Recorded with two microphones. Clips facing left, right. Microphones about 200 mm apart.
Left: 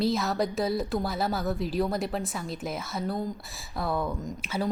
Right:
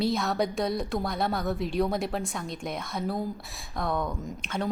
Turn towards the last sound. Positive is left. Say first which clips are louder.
# left 1 dB
turn(degrees=5)  # may be behind; listen again after turning